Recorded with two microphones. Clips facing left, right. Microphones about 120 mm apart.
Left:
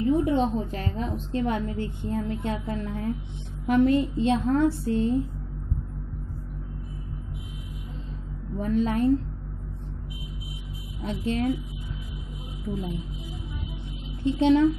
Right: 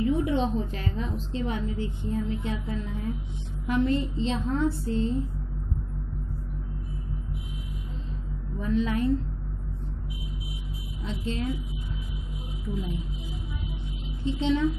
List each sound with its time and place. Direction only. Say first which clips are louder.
0.0 s a woman's voice: left 3 dB; 40° left (ahead or behind)
8.5 s a woman's voice: left 2 dB; 50° left (ahead or behind)
11.0 s a woman's voice: left 5 dB; 55° left (ahead or behind)
14.2 s a woman's voice: left 6 dB; 55° left (ahead or behind)